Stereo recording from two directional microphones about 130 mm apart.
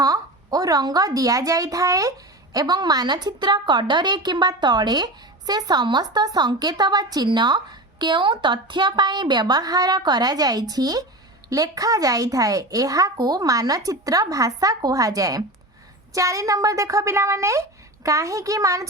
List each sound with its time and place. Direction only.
0.0 s a child's voice: 30° right (ahead or behind)